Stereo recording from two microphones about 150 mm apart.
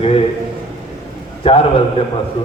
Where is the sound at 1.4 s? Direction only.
40° left (ahead or behind).